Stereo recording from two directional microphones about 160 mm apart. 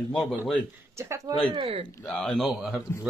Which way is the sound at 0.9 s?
20° right (ahead or behind).